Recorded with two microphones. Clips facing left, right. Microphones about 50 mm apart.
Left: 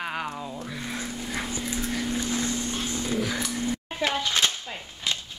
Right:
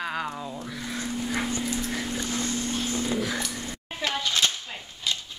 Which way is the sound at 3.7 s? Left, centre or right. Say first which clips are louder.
Left 3 dB; left.